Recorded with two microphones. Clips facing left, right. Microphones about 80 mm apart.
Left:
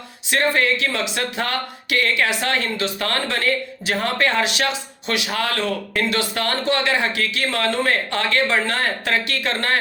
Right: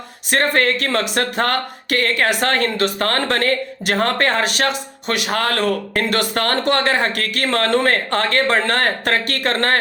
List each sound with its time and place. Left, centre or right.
0.3 s speech: right
2.3 s speech: right